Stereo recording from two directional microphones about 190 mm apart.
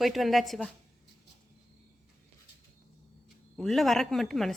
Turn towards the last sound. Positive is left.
turn(degrees=0)  # may be behind; listen again after turning